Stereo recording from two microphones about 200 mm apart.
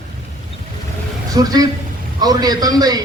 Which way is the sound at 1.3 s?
20° right (ahead or behind).